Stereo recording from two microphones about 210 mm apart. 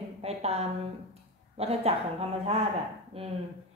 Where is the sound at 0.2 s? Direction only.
30° right (ahead or behind).